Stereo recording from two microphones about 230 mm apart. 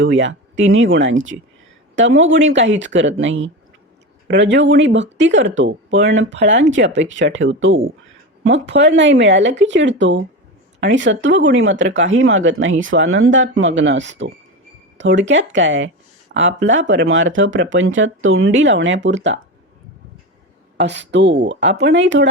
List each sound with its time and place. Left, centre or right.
0.0 s speech: right
20.7 s speech: right